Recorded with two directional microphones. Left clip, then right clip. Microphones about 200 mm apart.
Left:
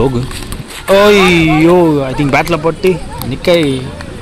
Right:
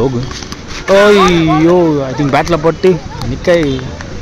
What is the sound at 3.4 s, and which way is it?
Speech, 10° left (ahead or behind).